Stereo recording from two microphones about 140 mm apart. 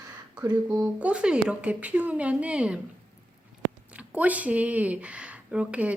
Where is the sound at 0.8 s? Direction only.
10° right (ahead or behind).